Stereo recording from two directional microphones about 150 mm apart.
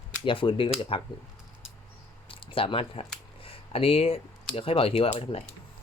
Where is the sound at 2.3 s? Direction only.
35° left (ahead or behind).